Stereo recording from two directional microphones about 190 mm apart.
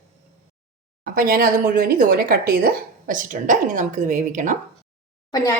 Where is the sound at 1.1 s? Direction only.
50° right (ahead or behind).